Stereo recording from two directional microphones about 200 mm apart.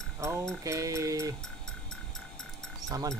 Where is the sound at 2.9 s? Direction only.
15° right (ahead or behind).